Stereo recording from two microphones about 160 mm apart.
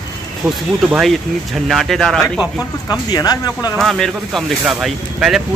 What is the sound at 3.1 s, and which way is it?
Speech, 25° left (ahead or behind).